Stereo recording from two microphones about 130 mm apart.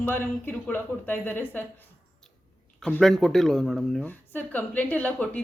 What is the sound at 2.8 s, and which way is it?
Speech, 5° left (ahead or behind).